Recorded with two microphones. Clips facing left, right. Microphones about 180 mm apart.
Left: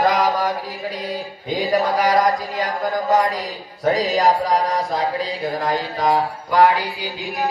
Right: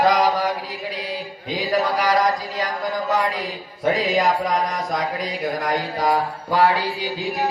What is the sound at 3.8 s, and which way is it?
Mantra, 35° left (ahead or behind).